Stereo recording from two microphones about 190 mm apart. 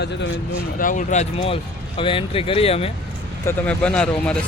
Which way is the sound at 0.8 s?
45° left (ahead or behind).